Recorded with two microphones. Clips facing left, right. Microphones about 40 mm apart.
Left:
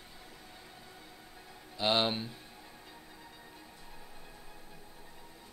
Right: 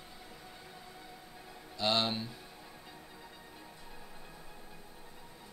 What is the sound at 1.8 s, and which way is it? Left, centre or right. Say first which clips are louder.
Speech: left 2 dB; centre.